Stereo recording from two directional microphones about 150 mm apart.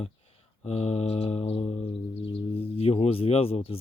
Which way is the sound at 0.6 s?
45° left (ahead or behind).